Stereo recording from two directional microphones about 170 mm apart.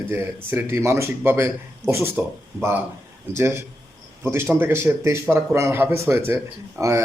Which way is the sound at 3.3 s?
15° right (ahead or behind).